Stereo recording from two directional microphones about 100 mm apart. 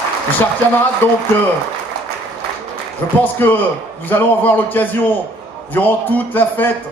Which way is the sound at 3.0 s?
25° left (ahead or behind).